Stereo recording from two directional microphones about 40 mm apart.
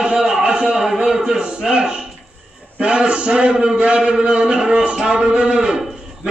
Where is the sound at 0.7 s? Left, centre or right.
Centre.